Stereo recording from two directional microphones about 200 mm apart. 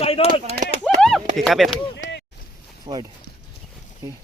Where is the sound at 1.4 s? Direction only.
Centre (ahead or behind).